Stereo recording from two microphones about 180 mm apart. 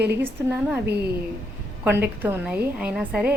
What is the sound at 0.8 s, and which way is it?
Speech, 65° right (ahead or behind).